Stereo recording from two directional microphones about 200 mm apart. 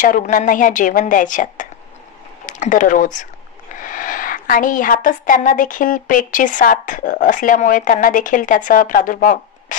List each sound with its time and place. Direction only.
0.0 s a woman's voice: 40° left (ahead or behind)